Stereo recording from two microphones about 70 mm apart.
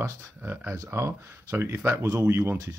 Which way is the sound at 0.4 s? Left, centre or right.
Right.